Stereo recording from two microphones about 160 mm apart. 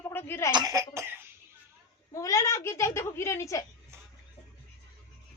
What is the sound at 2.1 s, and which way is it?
A woman's voice, 20° left (ahead or behind).